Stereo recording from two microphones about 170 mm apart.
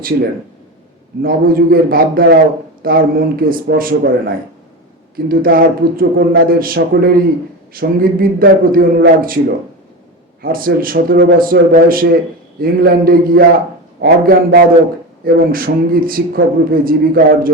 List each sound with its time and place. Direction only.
0.1 s speech: 70° right (ahead or behind)
1.2 s speech: 60° right (ahead or behind)
10.4 s speech: 60° right (ahead or behind)